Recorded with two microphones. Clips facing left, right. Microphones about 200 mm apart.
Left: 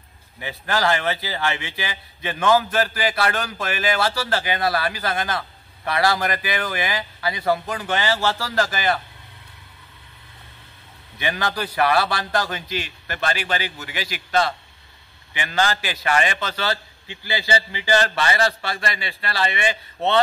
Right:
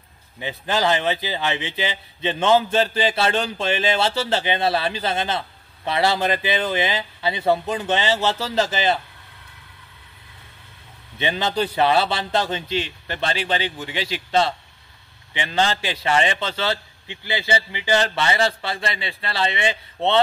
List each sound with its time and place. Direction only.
0.4 s speech: 20° right (ahead or behind)
11.1 s speech: 20° right (ahead or behind)